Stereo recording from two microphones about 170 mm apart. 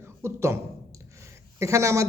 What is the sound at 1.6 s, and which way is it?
Speech, 15° right (ahead or behind).